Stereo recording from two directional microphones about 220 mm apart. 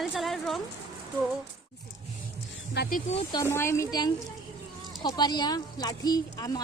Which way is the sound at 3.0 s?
30° left (ahead or behind).